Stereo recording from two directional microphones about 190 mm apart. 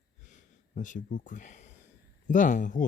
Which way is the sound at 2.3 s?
45° left (ahead or behind).